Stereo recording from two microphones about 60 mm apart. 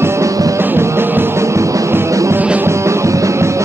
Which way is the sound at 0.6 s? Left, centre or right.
Right.